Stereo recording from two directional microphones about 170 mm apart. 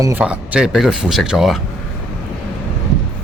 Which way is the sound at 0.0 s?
10° right (ahead or behind).